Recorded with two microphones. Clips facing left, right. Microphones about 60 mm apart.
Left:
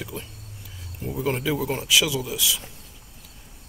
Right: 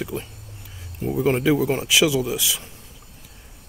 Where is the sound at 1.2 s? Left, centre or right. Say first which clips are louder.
Right 6 dB; right.